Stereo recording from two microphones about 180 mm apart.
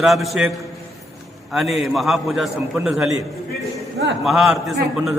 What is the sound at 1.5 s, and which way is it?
Speech, centre (ahead or behind).